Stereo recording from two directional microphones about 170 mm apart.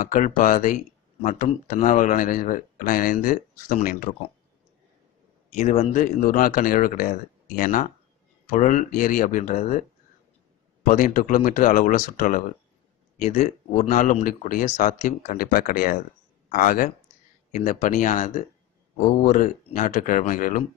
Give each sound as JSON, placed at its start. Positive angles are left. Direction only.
{"t": 0.0, "sound": "speech", "side_deg": 50}
{"t": 5.5, "sound": "speech", "side_deg": 45}